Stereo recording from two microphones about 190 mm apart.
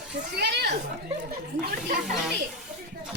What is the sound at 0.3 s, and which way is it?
Speech, 60° right (ahead or behind).